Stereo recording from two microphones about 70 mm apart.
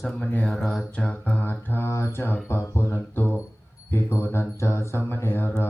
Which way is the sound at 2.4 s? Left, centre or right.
Left.